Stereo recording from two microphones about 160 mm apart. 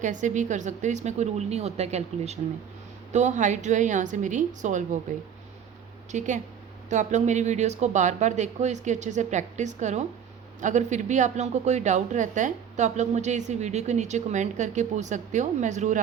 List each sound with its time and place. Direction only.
0.0 s speech: 50° right (ahead or behind)
6.1 s speech: 50° right (ahead or behind)